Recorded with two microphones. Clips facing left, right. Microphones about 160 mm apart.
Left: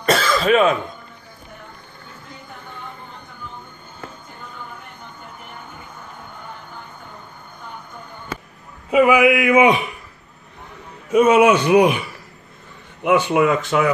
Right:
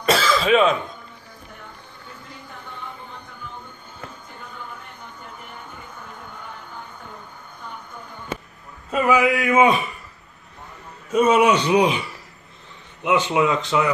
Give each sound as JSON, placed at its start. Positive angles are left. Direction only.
{"t": 0.0, "sound": "cough", "side_deg": 0}
{"t": 8.9, "sound": "speech", "side_deg": 10}
{"t": 11.1, "sound": "speech", "side_deg": 10}
{"t": 13.0, "sound": "speech", "side_deg": 10}
{"t": 13.4, "sound": "speech", "side_deg": 55}